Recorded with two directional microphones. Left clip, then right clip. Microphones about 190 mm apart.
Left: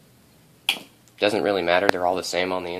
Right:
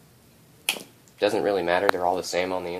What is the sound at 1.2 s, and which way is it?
Speech, 35° left (ahead or behind).